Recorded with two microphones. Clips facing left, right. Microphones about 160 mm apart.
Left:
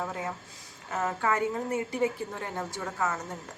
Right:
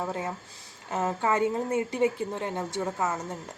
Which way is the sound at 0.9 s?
25° right (ahead or behind).